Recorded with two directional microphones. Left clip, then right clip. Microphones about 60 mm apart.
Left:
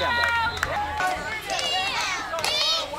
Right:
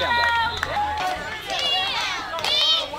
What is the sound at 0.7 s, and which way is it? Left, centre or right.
Run, centre.